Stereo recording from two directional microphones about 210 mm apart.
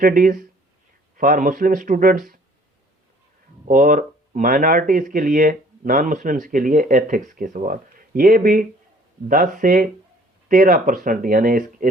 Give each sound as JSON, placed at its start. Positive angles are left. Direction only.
{"t": 0.0, "sound": "speech", "side_deg": -40}
{"t": 3.7, "sound": "speech", "side_deg": -40}